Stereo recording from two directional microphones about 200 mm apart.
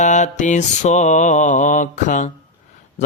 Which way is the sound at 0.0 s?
35° left (ahead or behind).